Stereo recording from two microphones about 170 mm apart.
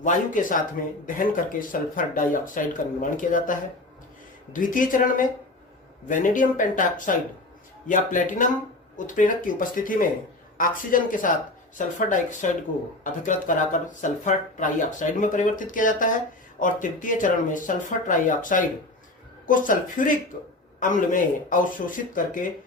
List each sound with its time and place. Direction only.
0.0 s speech: 50° left (ahead or behind)
4.6 s speech: 50° left (ahead or behind)